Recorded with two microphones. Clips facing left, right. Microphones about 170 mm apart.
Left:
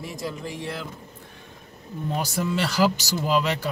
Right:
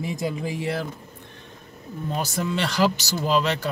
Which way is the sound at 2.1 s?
5° left (ahead or behind).